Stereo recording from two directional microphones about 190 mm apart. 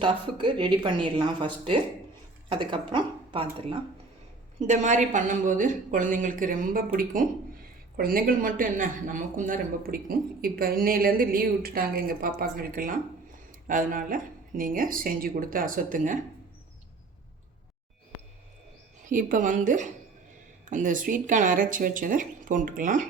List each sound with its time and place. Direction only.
0.0 s speech: 25° right (ahead or behind)
4.6 s speech: 40° right (ahead or behind)
19.0 s speech: 45° right (ahead or behind)